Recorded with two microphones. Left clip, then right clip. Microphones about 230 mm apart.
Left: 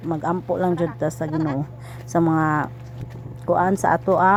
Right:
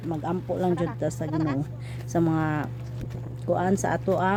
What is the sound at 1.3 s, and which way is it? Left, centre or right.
Speech, centre.